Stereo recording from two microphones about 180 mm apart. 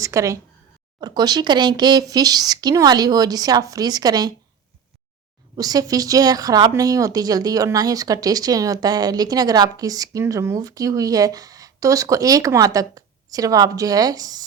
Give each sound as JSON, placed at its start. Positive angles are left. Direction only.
{"t": 0.0, "sound": "a woman's voice", "side_deg": -15}
{"t": 5.5, "sound": "a woman's voice", "side_deg": -20}